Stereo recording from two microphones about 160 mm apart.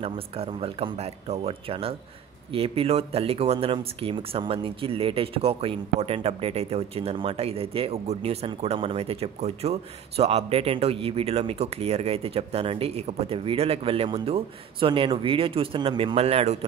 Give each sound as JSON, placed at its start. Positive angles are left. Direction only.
{"t": 0.0, "sound": "speech", "side_deg": -35}